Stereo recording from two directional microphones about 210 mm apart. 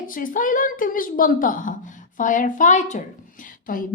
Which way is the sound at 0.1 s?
40° left (ahead or behind).